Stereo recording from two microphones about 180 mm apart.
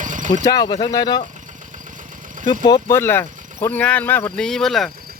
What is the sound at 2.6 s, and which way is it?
Speech, 20° left (ahead or behind).